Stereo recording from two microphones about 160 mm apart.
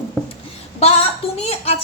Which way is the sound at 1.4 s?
40° left (ahead or behind).